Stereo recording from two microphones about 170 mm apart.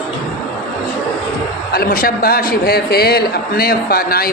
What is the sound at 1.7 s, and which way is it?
A man's voice, 55° left (ahead or behind).